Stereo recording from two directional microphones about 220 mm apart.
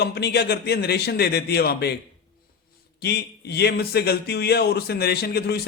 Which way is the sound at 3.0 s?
50° left (ahead or behind).